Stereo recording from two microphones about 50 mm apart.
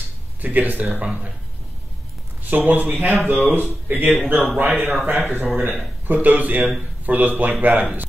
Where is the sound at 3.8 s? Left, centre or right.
Right.